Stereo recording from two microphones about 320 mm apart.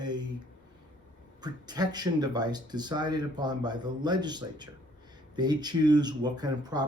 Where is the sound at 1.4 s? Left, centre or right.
Centre.